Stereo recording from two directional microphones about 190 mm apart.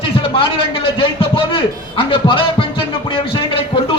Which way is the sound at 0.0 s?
30° left (ahead or behind).